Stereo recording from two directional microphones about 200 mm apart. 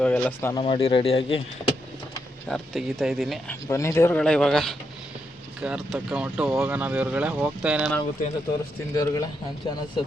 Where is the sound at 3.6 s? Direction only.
15° left (ahead or behind); by 7.9 s 5° right (ahead or behind).